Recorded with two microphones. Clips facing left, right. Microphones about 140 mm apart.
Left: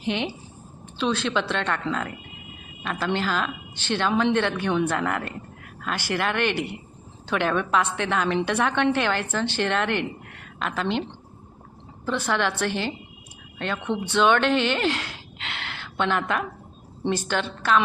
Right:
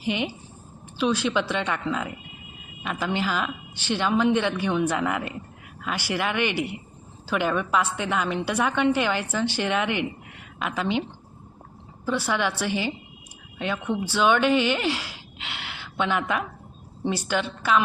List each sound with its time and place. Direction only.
0.0 s a woman's voice: 10° right (ahead or behind)
12.0 s a woman's voice: 10° right (ahead or behind)